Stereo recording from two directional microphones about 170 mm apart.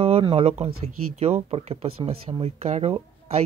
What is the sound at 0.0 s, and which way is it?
Speech, 35° right (ahead or behind).